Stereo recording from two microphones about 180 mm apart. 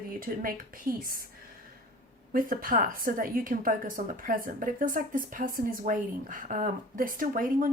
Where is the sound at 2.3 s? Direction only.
50° right (ahead or behind).